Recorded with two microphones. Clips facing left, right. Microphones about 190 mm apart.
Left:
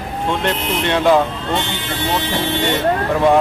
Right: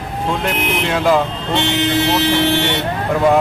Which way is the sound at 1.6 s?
75° right (ahead or behind).